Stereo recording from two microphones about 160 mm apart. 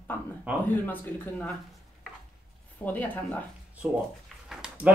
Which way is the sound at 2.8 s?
10° left (ahead or behind).